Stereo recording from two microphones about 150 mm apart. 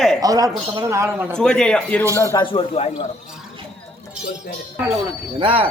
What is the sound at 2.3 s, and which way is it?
Speech, 35° left (ahead or behind).